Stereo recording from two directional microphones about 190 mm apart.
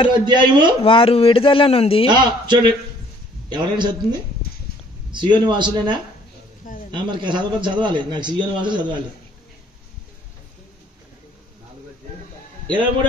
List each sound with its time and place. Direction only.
0.1 s a man's voice: 25° right (ahead or behind)
0.8 s speech: 30° left (ahead or behind)
2.0 s a man's voice: 25° right (ahead or behind)